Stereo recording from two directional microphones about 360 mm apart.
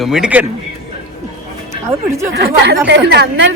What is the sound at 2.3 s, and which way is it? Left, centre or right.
Speech, right.